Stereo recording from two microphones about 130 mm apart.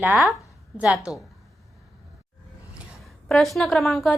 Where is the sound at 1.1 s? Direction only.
25° left (ahead or behind).